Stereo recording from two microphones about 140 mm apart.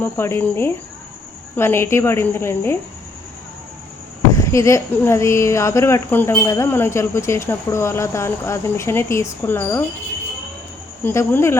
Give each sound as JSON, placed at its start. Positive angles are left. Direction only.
{"t": 0.0, "sound": "speech", "side_deg": 15}
{"t": 4.4, "sound": "speech", "side_deg": 20}
{"t": 11.0, "sound": "speech", "side_deg": 15}